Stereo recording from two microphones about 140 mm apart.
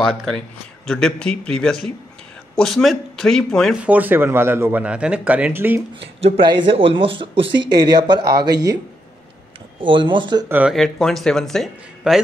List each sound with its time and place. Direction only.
0.0 s speech: centre (ahead or behind)
3.8 s speech: 10° right (ahead or behind)
5.9 s speech: 40° right (ahead or behind)
9.8 s speech: 35° right (ahead or behind)
10.7 s speech: centre (ahead or behind)